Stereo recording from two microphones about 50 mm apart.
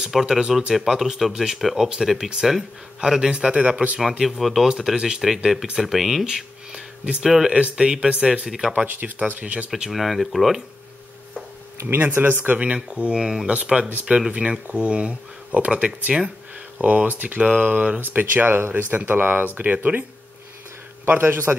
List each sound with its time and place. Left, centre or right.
0.1 s speech: centre; by 4.0 s right
4.1 s speech: centre
4.4 s speech: centre
4.6 s speech: centre
8.8 s speech: right
9.8 s speech: centre
11.9 s speech: right
12.5 s speech: right
18.0 s speech: right
21.1 s speech: right